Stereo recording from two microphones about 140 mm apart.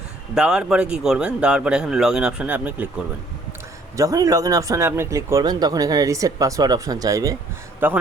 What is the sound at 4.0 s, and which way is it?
Speech, 25° right (ahead or behind).